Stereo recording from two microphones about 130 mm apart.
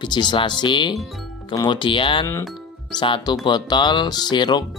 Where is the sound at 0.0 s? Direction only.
35° left (ahead or behind).